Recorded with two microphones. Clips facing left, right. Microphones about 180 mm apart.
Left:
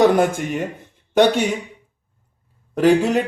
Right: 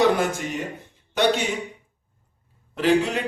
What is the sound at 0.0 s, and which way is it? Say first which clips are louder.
Speech: left 5 dB; 50° left (ahead or behind).